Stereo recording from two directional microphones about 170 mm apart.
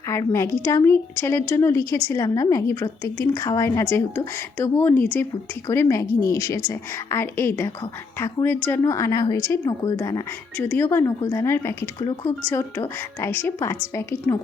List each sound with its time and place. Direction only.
0.1 s a woman's voice: 15° left (ahead or behind)